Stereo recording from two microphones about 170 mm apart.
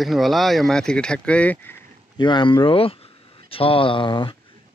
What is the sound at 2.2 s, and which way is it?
A man's voice, 25° left (ahead or behind).